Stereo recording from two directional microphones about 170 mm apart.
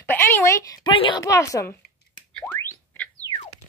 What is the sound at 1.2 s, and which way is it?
Speech, 20° left (ahead or behind).